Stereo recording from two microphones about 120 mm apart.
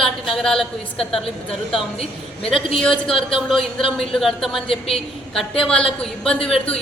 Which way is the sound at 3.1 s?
50° left (ahead or behind).